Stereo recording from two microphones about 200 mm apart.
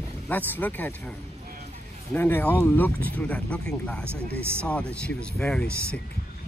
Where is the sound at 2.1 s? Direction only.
10° left (ahead or behind).